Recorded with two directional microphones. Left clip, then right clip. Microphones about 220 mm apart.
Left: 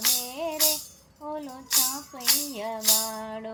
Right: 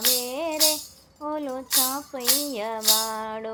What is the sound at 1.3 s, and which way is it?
Speech, 15° right (ahead or behind).